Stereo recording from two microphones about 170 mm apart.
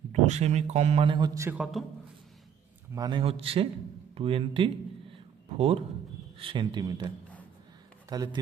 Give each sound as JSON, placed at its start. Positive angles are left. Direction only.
{"t": 0.1, "sound": "a man's voice", "side_deg": -40}
{"t": 1.5, "sound": "a man's voice", "side_deg": -5}
{"t": 2.9, "sound": "a man's voice", "side_deg": -25}
{"t": 8.1, "sound": "a man's voice", "side_deg": -25}